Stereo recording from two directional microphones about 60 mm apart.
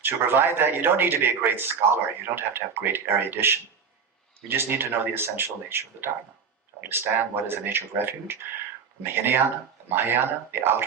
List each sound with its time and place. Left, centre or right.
0.0 s speech: right